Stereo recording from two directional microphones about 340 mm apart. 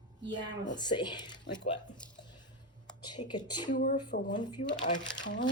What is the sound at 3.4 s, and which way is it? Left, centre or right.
Speech, centre.